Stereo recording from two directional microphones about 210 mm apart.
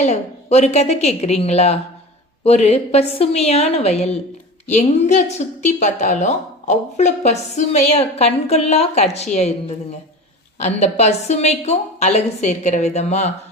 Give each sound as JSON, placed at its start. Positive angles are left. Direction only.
{"t": 0.0, "sound": "a woman's voice", "side_deg": 30}
{"t": 10.6, "sound": "a woman's voice", "side_deg": 30}